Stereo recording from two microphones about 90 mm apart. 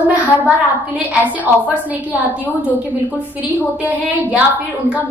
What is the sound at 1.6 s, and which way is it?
A woman's voice, 15° right (ahead or behind).